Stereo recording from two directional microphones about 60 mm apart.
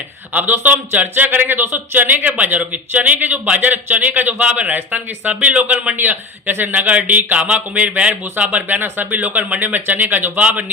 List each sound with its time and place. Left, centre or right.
0.3 s speech: right